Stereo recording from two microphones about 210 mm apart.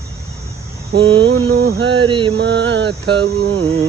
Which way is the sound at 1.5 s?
75° right (ahead or behind).